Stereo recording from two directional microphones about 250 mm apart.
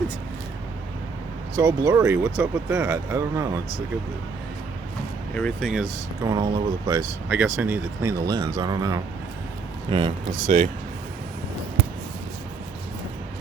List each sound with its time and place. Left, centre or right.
1.5 s speech: centre
5.3 s speech: centre
6.2 s speech: centre